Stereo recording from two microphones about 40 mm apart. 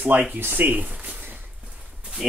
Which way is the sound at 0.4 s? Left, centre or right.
Right.